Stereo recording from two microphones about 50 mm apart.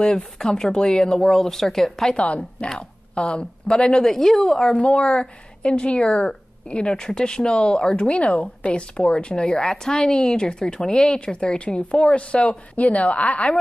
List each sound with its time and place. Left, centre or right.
0.0 s a woman's voice: centre
2.0 s a woman's voice: left
4.0 s a woman's voice: centre; by 13.6 s left